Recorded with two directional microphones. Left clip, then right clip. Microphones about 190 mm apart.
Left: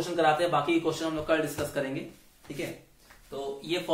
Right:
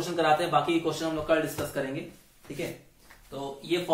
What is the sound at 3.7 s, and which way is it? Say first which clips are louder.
Speech: right 3 dB; 40° left (ahead or behind).